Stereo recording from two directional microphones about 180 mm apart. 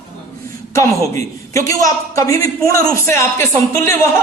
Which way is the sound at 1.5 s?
20° left (ahead or behind).